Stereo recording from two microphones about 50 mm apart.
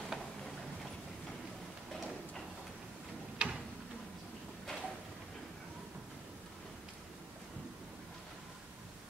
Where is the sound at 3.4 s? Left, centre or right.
Right.